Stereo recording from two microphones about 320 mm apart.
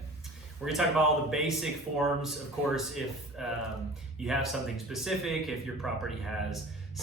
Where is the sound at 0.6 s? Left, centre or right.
Centre.